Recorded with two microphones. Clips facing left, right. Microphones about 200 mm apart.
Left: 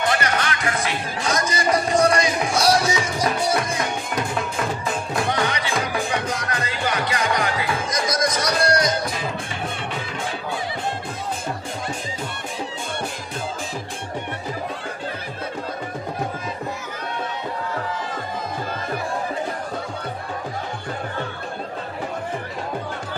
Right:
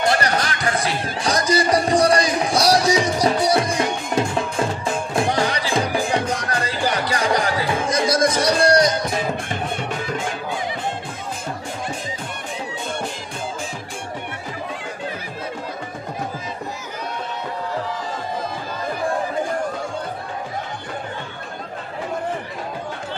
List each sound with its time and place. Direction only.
0.1 s music: 35° right (ahead or behind)